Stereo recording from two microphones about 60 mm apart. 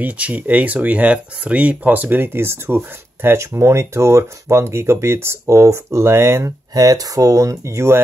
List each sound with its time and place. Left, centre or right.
0.0 s speech: right
6.7 s speech: right